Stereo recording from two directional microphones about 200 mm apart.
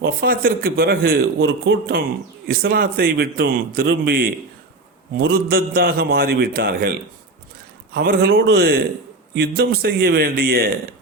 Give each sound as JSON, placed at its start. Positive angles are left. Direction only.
{"t": 0.0, "sound": "a man's voice", "side_deg": -45}
{"t": 7.9, "sound": "a man's voice", "side_deg": -50}